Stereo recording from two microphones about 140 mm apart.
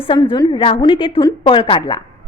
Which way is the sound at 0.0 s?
35° left (ahead or behind).